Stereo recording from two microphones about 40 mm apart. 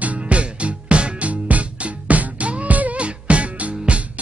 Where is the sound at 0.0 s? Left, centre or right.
Right.